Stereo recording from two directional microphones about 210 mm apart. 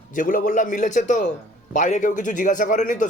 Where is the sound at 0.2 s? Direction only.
40° left (ahead or behind).